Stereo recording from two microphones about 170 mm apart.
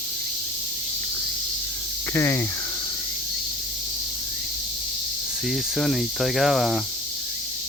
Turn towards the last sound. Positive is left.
turn(degrees=0)  # may be behind; listen again after turning